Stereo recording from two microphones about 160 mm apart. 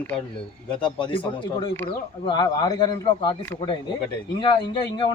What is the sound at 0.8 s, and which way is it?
Speech, 30° left (ahead or behind).